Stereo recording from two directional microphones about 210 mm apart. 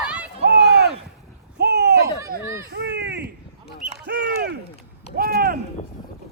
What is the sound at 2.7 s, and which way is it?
Baby cry, 55° right (ahead or behind).